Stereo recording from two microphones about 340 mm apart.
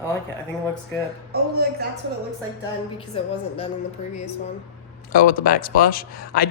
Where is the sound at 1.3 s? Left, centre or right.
Right.